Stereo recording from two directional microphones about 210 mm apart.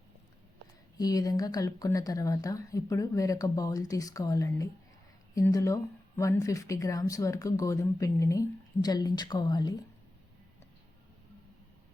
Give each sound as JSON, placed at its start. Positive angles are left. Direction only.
{"t": 0.9, "sound": "speech", "side_deg": 15}